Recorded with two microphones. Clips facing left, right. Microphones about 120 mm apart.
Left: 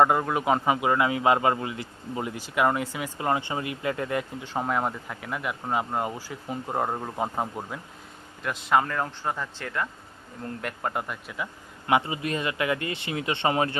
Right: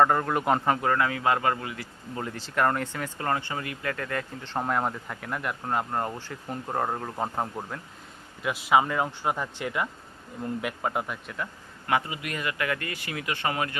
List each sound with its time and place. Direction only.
0.0 s a man's voice: 10° left (ahead or behind)
8.4 s speech: 5° right (ahead or behind)
11.9 s speech: 25° left (ahead or behind)